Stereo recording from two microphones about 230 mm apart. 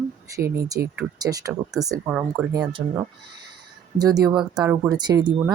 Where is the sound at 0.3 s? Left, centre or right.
Centre.